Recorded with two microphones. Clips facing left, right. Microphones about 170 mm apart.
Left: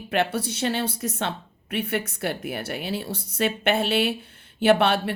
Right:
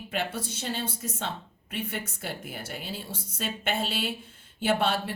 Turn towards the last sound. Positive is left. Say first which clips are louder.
# left 7 dB
turn(degrees=70)  # may be behind; listen again after turning